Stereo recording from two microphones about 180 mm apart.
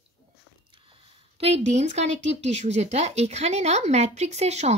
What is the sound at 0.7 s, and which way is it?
Speech, 30° right (ahead or behind).